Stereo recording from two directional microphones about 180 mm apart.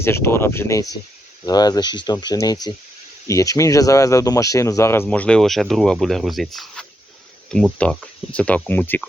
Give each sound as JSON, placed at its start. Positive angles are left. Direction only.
{"t": 0.0, "sound": "speech", "side_deg": 15}